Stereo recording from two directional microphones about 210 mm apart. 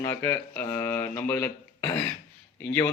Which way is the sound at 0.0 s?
10° left (ahead or behind).